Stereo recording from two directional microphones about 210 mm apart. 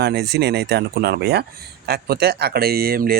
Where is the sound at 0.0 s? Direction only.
50° right (ahead or behind).